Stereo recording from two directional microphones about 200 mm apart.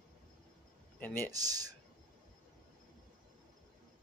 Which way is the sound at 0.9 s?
10° left (ahead or behind).